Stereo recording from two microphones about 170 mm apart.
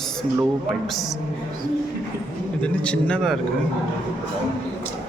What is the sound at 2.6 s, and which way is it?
Speech, 5° left (ahead or behind).